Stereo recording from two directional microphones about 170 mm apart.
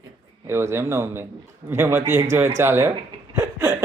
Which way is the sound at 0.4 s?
15° right (ahead or behind).